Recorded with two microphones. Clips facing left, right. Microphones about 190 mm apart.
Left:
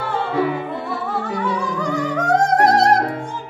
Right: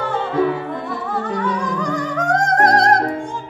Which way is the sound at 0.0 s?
10° left (ahead or behind).